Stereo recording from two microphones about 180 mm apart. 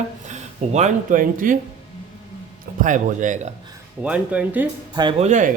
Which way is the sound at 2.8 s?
45° right (ahead or behind).